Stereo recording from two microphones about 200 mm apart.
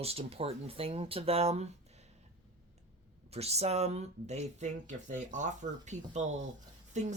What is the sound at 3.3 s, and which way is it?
Speech, 30° right (ahead or behind).